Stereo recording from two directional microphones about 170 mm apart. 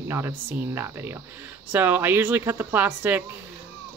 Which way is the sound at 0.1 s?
10° right (ahead or behind).